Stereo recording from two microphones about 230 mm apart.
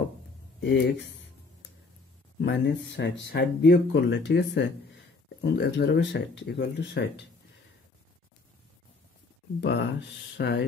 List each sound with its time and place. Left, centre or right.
0.6 s speech: left
2.4 s speech: left
9.6 s speech: left